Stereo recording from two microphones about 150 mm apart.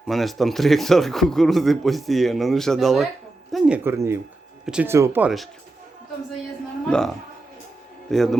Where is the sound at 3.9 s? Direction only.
15° right (ahead or behind).